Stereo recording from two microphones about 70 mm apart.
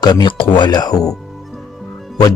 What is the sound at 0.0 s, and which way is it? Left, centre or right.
Speech, left.